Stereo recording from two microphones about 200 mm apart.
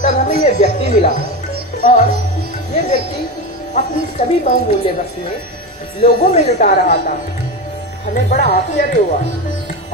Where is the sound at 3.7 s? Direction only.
35° left (ahead or behind).